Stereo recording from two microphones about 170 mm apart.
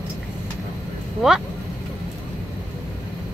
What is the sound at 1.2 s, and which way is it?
Speech, 5° right (ahead or behind).